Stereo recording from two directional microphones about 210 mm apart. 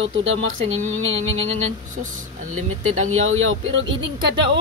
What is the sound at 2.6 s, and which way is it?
Speech, 80° right.